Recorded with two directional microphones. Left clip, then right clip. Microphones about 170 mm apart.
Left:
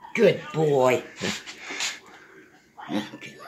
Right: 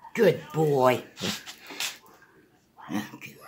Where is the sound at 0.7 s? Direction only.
35° right (ahead or behind).